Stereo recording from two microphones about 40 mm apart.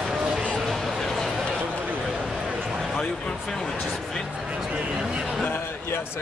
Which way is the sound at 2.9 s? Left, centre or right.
Left.